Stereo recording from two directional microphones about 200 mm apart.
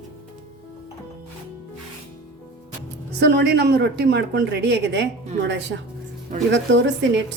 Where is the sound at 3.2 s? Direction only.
55° right (ahead or behind).